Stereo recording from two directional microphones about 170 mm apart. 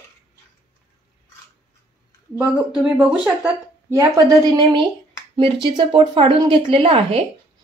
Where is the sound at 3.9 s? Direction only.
20° right (ahead or behind).